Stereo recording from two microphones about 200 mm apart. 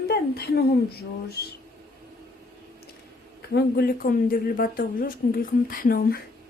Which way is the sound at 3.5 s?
50° left (ahead or behind).